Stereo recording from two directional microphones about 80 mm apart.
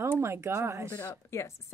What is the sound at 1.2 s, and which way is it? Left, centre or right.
Speech, left.